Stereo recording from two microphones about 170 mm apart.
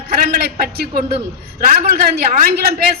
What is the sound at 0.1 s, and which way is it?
A man's voice, 65° right (ahead or behind).